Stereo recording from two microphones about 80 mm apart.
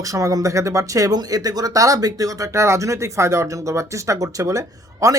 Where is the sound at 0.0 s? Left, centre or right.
Right.